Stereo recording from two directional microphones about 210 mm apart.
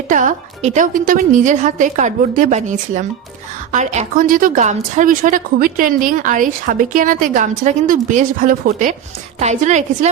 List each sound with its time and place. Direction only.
0.1 s a woman's voice: 35° right (ahead or behind)